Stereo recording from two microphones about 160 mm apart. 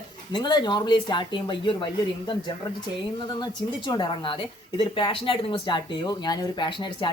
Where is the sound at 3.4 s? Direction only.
30° left (ahead or behind).